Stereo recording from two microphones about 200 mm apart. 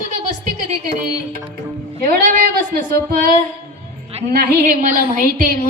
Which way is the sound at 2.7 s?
50° right (ahead or behind).